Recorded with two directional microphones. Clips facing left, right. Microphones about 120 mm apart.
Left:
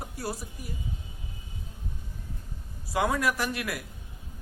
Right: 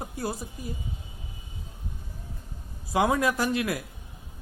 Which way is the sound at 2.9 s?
20° right (ahead or behind).